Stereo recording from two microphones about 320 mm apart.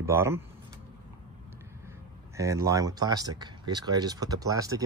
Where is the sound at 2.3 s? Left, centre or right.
Centre.